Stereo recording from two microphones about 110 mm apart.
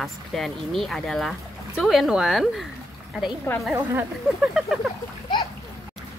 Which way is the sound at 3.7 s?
15° right (ahead or behind).